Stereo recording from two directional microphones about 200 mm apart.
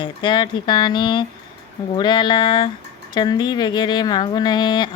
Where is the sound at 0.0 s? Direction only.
25° left (ahead or behind).